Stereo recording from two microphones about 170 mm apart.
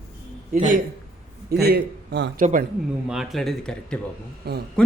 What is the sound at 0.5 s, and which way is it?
Speech, 55° right (ahead or behind).